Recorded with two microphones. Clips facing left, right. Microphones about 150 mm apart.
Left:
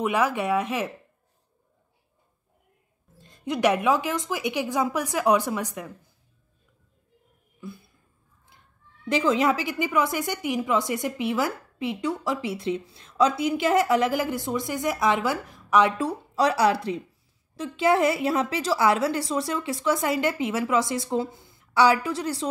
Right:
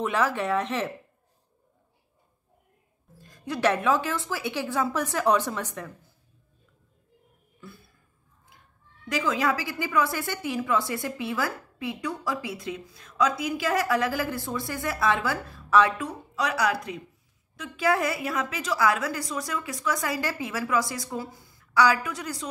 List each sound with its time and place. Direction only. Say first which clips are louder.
0.0 s a woman's voice: left 2 dB; 15° left (ahead or behind)
3.2 s a woman's voice: left 3 dB; 25° left (ahead or behind)
9.1 s a woman's voice: left 4 dB; 25° left (ahead or behind)
16.0 s a woman's voice: left 6 dB; 30° left (ahead or behind)